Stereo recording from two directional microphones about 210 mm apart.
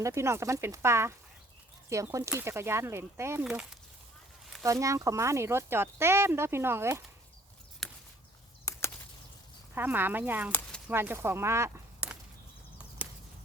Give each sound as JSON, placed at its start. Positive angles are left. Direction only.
{"t": 0.0, "sound": "speech", "side_deg": -15}
{"t": 4.6, "sound": "speech", "side_deg": -15}
{"t": 7.8, "sound": "a sound", "side_deg": 0}
{"t": 9.7, "sound": "speech", "side_deg": -10}